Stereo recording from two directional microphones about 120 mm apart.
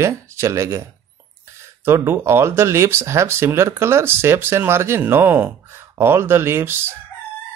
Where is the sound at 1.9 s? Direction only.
20° right (ahead or behind).